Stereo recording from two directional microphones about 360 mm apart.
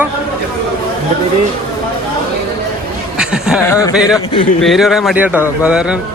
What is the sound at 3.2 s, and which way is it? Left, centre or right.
Speech, centre.